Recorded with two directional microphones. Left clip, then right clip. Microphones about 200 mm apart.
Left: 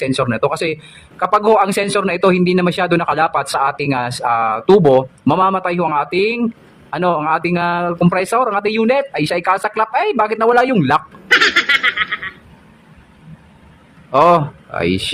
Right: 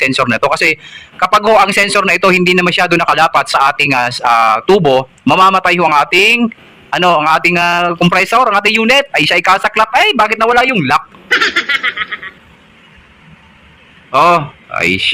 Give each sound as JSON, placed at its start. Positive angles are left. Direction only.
{"t": 0.0, "sound": "a man's voice", "side_deg": 5}
{"t": 4.8, "sound": "speech", "side_deg": -15}
{"t": 5.2, "sound": "a man's voice", "side_deg": 5}
{"t": 11.3, "sound": "snicker", "side_deg": 0}
{"t": 14.1, "sound": "a man's voice", "side_deg": 15}